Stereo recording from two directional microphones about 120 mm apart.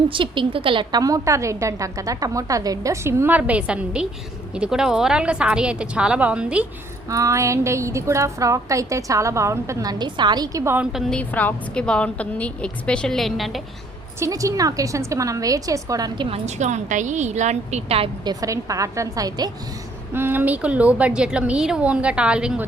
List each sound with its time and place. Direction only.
0.1 s a woman's voice: 45° right (ahead or behind); by 6.7 s 10° right (ahead or behind)
7.1 s a woman's voice: 25° right (ahead or behind)
11.1 s a woman's voice: 10° left (ahead or behind)
14.2 s a woman's voice: 30° right (ahead or behind)
16.6 s a woman's voice: 80° right; by 18.1 s 55° right (ahead or behind)
18.3 s a woman's voice: 30° right (ahead or behind)
20.1 s a woman's voice: 15° right (ahead or behind)